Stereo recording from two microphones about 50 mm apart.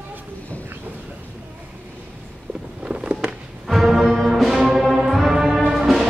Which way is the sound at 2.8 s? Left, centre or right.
Right.